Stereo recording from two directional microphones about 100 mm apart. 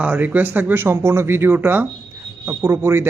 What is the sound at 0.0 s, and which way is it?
Speech, 15° right (ahead or behind).